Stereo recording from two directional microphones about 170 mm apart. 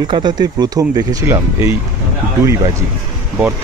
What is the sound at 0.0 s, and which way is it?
Speech, 25° right (ahead or behind).